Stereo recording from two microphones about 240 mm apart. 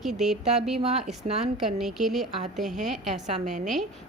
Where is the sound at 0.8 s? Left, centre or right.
Right.